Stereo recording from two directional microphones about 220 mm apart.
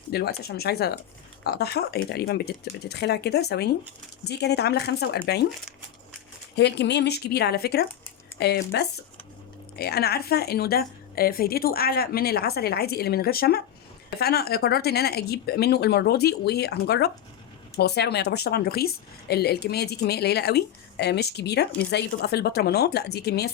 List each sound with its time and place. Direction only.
0.1 s a woman's voice: 45° left (ahead or behind)
6.6 s a woman's voice: 50° left (ahead or behind)